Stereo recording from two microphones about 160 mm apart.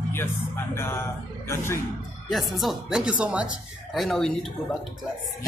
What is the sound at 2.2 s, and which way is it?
Speech, centre (ahead or behind).